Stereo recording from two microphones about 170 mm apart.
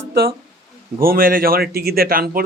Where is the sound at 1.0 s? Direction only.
60° right (ahead or behind).